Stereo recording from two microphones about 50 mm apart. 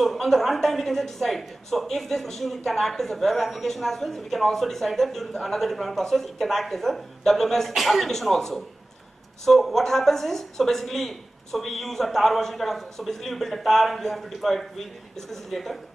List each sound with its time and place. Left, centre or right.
0.0 s a woman's voice: centre